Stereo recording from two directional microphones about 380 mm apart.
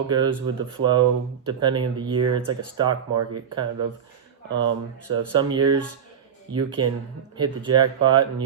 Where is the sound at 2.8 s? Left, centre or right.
Right.